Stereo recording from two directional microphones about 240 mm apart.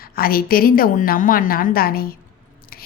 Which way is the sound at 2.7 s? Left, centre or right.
Left.